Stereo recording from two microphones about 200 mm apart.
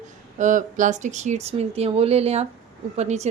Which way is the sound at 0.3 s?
40° right (ahead or behind).